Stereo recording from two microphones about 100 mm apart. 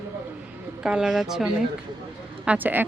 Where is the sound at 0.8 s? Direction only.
10° right (ahead or behind).